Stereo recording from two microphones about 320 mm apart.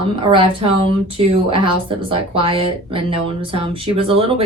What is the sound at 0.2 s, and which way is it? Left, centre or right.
A woman's voice, centre.